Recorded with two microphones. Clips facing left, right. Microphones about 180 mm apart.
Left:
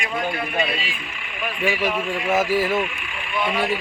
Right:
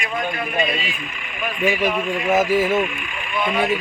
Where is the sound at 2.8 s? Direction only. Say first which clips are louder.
Right 3 dB; 50° right (ahead or behind).